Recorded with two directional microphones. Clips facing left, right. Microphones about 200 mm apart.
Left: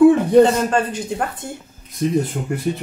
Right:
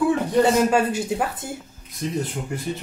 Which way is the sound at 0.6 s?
5° right (ahead or behind).